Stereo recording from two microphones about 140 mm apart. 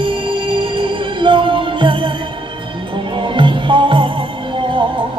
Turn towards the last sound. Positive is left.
turn(degrees=-35)  # may be behind; listen again after turning